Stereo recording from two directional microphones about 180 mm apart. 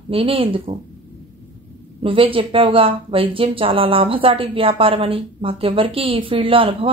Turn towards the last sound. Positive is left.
turn(degrees=-30)  # may be behind; listen again after turning